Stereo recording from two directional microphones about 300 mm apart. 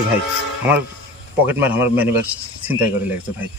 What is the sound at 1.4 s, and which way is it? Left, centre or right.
Speech, centre.